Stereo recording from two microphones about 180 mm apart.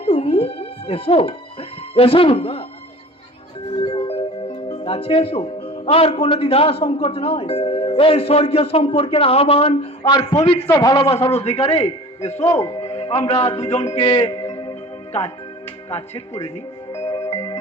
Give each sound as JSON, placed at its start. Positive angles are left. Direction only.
{"t": 0.0, "sound": "music", "side_deg": 35}
{"t": 2.0, "sound": "a man's voice", "side_deg": 30}
{"t": 3.8, "sound": "music", "side_deg": 30}
{"t": 5.6, "sound": "a man's voice", "side_deg": 35}
{"t": 11.3, "sound": "a man's voice", "side_deg": 35}
{"t": 12.5, "sound": "speech", "side_deg": 20}
{"t": 12.8, "sound": "a man's voice", "side_deg": 30}
{"t": 13.6, "sound": "speech", "side_deg": 15}
{"t": 14.5, "sound": "music", "side_deg": 25}
{"t": 15.9, "sound": "a man's voice", "side_deg": 35}
{"t": 17.1, "sound": "music", "side_deg": 20}